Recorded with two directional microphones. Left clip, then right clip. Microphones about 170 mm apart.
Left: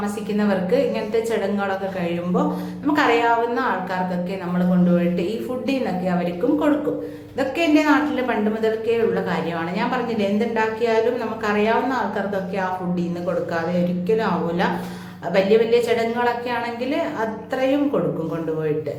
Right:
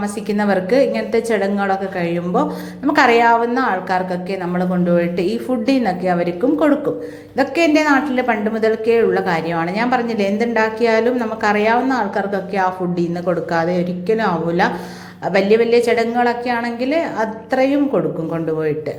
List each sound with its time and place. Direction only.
0.3 s a woman's voice: 40° right (ahead or behind)